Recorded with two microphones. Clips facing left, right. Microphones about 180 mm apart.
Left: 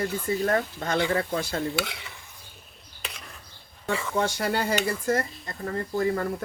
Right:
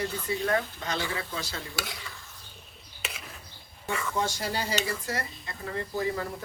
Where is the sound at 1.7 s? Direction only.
20° left (ahead or behind).